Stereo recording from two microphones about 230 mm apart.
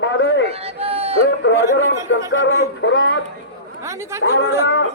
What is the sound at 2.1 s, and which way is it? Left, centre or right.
Speech, left.